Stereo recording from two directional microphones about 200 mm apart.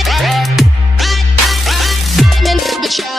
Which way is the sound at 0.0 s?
Centre (ahead or behind).